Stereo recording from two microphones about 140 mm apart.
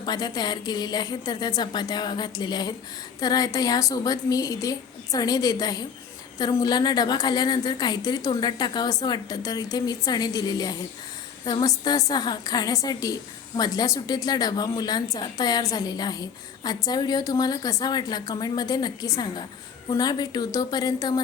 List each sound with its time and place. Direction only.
0.0 s a woman's voice: 30° left (ahead or behind)